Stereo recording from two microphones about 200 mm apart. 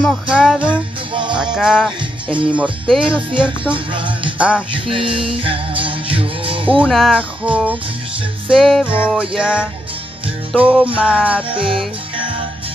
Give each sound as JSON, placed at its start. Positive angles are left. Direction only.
{"t": 0.0, "sound": "music", "side_deg": 0}
{"t": 1.1, "sound": "music", "side_deg": -25}
{"t": 1.4, "sound": "music", "side_deg": -5}
{"t": 2.2, "sound": "speech", "side_deg": -25}
{"t": 2.5, "sound": "speech", "side_deg": -5}
{"t": 3.7, "sound": "music", "side_deg": -25}
{"t": 4.4, "sound": "music", "side_deg": -5}
{"t": 4.7, "sound": "music", "side_deg": -25}
{"t": 6.8, "sound": "music", "side_deg": 0}
{"t": 10.6, "sound": "speech", "side_deg": -5}
{"t": 11.4, "sound": "music", "side_deg": -25}